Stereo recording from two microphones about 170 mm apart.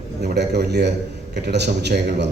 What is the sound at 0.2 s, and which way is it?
A man's voice, 75° right (ahead or behind).